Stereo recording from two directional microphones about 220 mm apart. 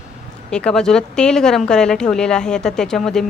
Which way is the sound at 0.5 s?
5° left (ahead or behind).